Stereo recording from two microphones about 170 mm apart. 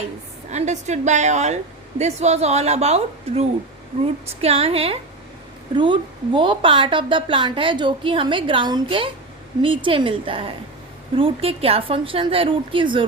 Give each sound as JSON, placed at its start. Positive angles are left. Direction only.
{"t": 0.5, "sound": "a woman's voice", "side_deg": -45}